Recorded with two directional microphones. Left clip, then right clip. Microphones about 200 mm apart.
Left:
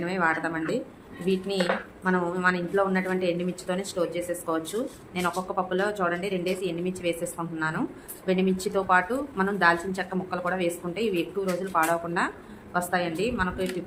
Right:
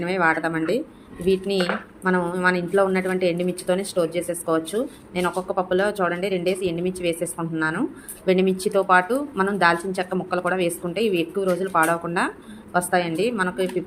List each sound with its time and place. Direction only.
0.0 s speech: 25° right (ahead or behind)